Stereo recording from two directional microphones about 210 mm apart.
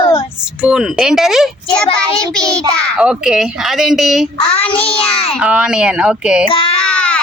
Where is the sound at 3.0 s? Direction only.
5° right (ahead or behind).